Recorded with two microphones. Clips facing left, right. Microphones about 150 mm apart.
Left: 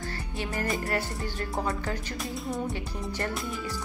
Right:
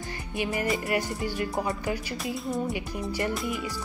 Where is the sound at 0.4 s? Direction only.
15° right (ahead or behind).